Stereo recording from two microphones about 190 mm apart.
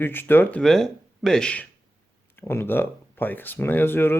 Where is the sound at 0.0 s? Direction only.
10° left (ahead or behind).